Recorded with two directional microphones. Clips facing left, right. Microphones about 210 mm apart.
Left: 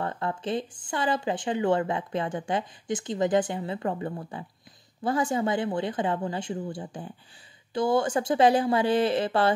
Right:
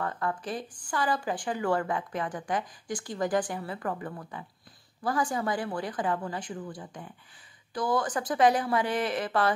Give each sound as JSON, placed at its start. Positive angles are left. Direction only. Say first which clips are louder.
{"t": 0.0, "sound": "speech", "louder": "left 2 dB", "side_deg": 25}